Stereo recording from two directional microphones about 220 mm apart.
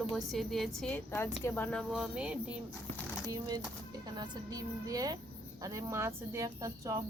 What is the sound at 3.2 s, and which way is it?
Speech, 15° right (ahead or behind).